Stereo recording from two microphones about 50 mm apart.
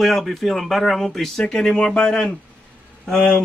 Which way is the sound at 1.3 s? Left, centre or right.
Centre.